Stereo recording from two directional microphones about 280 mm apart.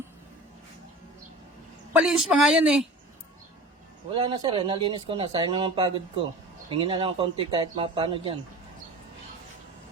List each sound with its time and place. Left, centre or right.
1.9 s a woman's voice: centre
4.1 s speech: centre